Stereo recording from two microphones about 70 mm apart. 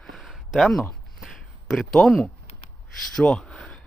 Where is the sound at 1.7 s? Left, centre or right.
Centre.